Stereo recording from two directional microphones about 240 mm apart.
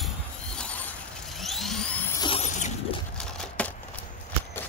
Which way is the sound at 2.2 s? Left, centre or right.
Left.